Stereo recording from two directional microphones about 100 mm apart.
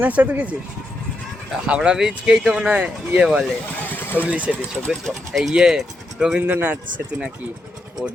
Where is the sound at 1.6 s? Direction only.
10° right (ahead or behind).